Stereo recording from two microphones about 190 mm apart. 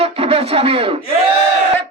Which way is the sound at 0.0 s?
30° right (ahead or behind).